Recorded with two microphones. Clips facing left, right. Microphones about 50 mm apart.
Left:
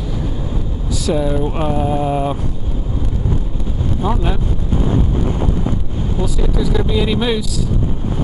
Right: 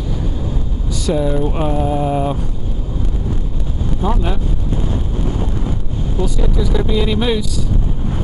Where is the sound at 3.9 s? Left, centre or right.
Centre.